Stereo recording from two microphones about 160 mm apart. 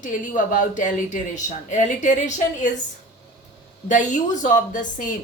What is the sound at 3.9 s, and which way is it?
A woman's voice, 50° left (ahead or behind).